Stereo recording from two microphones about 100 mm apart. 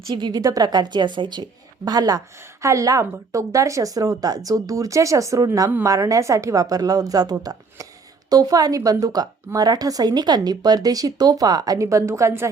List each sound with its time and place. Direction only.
0.1 s a woman's voice: 45° right (ahead or behind)